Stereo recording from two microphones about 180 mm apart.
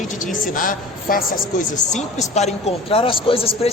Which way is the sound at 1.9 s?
40° left (ahead or behind).